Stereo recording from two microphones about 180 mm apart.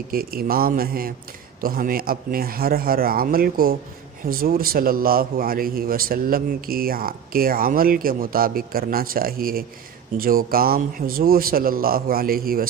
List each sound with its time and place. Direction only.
0.1 s a man's voice: 55° right (ahead or behind)